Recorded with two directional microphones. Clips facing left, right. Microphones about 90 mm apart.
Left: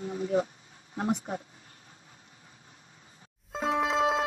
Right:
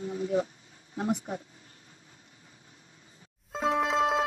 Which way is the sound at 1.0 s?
25° left (ahead or behind).